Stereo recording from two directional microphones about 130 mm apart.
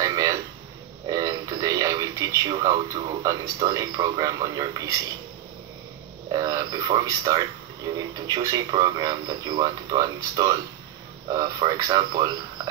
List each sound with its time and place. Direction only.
0.0 s a sound: 25° right (ahead or behind)
1.0 s radio: 30° right (ahead or behind)
2.6 s a man's voice: 25° right (ahead or behind)
6.3 s a man's voice: 30° right (ahead or behind)